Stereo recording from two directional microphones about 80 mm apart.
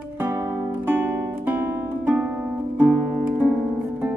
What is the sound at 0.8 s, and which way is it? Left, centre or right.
Music, right.